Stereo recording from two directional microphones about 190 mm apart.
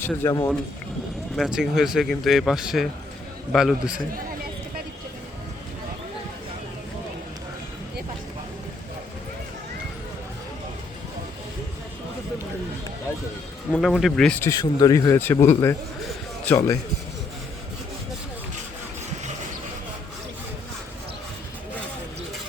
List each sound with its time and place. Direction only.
0.0 s speech: 15° left (ahead or behind)
1.4 s speech: centre (ahead or behind)
13.7 s speech: centre (ahead or behind); by 16.7 s 15° left (ahead or behind)